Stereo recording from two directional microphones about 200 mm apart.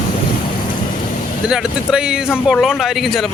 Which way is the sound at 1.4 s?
5° right (ahead or behind).